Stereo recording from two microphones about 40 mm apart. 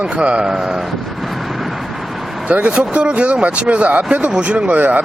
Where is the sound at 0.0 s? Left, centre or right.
Right.